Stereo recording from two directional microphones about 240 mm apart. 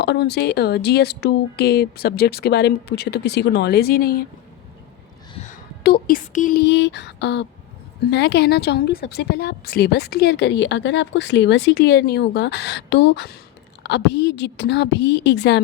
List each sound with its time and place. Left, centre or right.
0.0 s speech: left
5.3 s a sound: left
5.8 s a woman's voice: left